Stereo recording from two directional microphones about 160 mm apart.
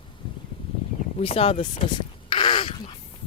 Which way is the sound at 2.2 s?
30° left (ahead or behind).